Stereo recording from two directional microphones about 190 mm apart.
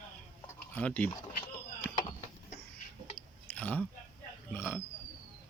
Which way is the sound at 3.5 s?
5° left (ahead or behind).